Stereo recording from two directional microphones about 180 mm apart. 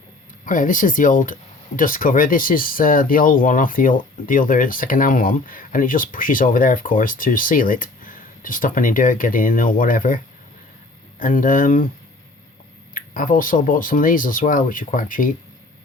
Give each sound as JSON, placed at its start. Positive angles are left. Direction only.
{"t": 0.4, "sound": "speech", "side_deg": 45}
{"t": 11.2, "sound": "speech", "side_deg": 50}
{"t": 12.9, "sound": "speech", "side_deg": 50}